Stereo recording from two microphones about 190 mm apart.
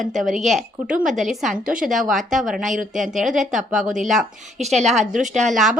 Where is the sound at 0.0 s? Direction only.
Centre (ahead or behind).